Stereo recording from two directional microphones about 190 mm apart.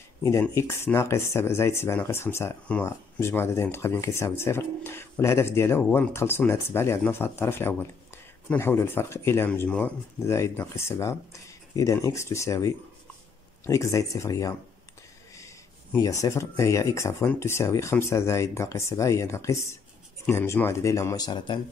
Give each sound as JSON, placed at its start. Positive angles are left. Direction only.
{"t": 0.2, "sound": "speech", "side_deg": 15}